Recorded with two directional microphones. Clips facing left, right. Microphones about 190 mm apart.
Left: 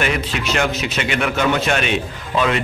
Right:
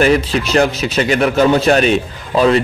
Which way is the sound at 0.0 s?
35° right (ahead or behind).